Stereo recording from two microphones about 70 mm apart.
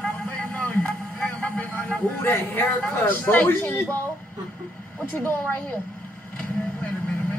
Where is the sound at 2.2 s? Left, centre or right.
Left.